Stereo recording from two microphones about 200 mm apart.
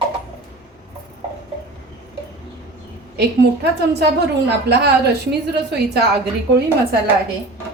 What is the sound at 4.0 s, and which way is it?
A woman's voice, 55° right (ahead or behind).